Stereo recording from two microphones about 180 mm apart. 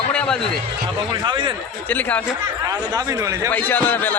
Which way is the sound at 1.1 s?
25° right (ahead or behind).